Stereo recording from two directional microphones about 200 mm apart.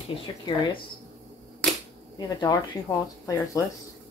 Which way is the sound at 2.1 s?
20° left (ahead or behind).